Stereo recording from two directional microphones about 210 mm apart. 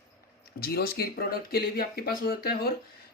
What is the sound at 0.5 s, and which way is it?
Speech, 45° left (ahead or behind).